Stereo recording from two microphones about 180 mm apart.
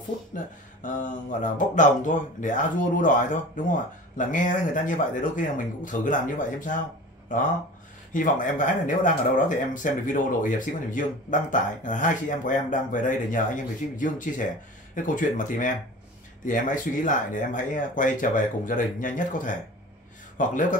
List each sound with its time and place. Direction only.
0.3 s music: 50° left (ahead or behind)
0.8 s speech: 45° left (ahead or behind)